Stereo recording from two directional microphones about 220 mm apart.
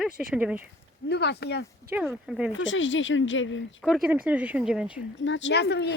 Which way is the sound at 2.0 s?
5° right (ahead or behind).